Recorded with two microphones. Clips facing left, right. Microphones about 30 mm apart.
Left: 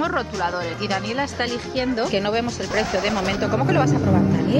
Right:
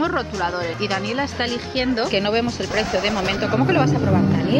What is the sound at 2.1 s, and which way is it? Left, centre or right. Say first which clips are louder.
Speech: right 2 dB; right.